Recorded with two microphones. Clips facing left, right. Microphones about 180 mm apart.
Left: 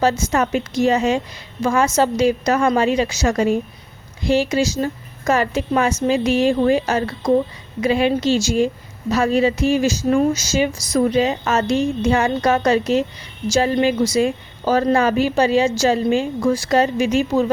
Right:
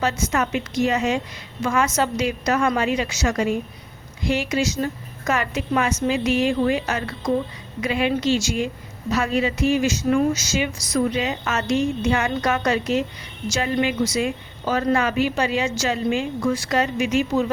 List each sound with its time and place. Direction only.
0.0 s a woman's voice: 30° left (ahead or behind)